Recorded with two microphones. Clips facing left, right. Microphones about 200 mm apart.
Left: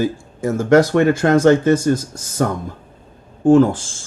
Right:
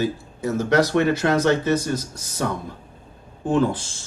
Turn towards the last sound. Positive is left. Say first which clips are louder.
# left 9 dB
turn(degrees=45)  # may be behind; listen again after turning